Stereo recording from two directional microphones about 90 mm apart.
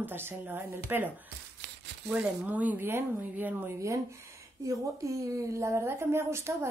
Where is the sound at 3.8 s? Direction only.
35° right (ahead or behind).